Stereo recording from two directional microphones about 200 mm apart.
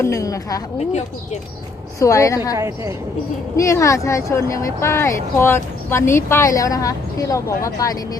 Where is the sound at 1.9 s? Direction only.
15° left (ahead or behind).